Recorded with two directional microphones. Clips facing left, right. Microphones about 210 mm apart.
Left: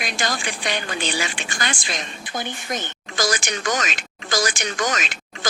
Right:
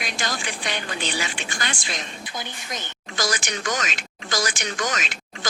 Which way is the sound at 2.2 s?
55° left (ahead or behind).